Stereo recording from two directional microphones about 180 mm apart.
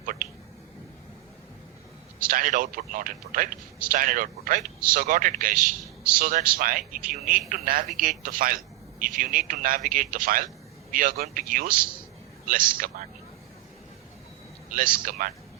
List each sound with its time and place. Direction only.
0.0 s a sound: 50° right (ahead or behind)
2.2 s a man's voice: 50° right (ahead or behind)
14.7 s a man's voice: 50° right (ahead or behind)